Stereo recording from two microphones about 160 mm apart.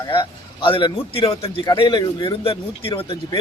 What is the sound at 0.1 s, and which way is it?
A man's voice, 30° left (ahead or behind).